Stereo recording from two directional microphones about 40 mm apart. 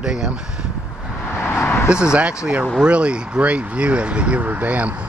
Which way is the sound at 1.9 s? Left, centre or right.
Right.